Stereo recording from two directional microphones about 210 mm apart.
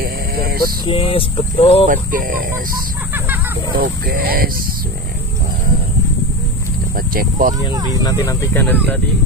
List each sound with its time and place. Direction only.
0.0 s vehicle: 45° right (ahead or behind)
0.8 s speech: 25° left (ahead or behind)
1.9 s speech: 40° right (ahead or behind)
3.7 s speech: 45° right (ahead or behind)
7.2 s speech: 40° right (ahead or behind)
8.0 s speech: 15° left (ahead or behind)